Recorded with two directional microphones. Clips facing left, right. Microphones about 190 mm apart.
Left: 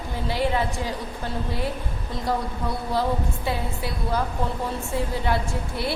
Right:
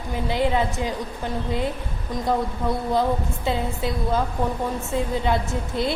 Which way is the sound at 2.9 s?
20° right (ahead or behind).